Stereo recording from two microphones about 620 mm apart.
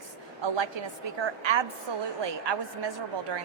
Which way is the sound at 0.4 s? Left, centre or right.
Right.